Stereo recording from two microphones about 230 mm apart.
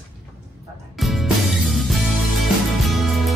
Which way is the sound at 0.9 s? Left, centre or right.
Centre.